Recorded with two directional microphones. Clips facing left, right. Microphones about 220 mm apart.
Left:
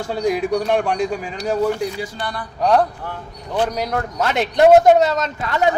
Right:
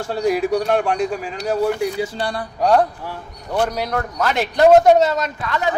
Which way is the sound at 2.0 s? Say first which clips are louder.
Right 4 dB; 30° right (ahead or behind).